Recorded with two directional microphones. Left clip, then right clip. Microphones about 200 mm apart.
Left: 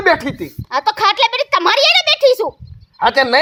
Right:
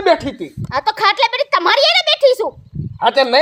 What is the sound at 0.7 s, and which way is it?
A child's voice, 35° left (ahead or behind).